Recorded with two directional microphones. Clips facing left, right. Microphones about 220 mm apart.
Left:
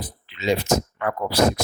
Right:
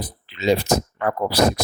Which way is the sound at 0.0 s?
40° right (ahead or behind).